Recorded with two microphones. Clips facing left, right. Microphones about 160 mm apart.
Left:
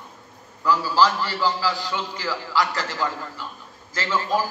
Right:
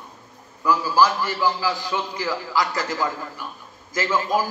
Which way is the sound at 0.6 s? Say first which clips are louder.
Right 1 dB; 15° right (ahead or behind).